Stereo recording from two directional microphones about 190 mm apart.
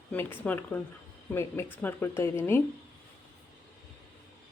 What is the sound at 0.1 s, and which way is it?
Speech, 10° left (ahead or behind).